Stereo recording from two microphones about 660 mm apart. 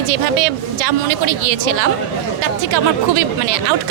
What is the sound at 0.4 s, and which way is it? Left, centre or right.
Speech, right.